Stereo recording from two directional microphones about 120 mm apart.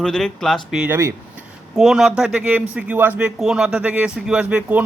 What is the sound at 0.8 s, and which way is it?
Speech, 20° right (ahead or behind).